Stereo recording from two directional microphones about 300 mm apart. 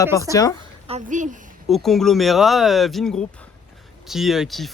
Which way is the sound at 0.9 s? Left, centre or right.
Right.